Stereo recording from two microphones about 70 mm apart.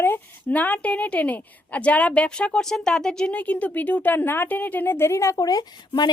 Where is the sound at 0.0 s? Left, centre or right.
Left.